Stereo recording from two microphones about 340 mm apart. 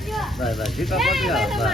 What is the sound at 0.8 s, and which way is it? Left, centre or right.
Speech, centre.